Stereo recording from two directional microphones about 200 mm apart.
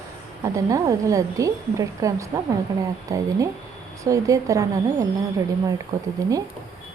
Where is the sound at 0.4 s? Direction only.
15° right (ahead or behind).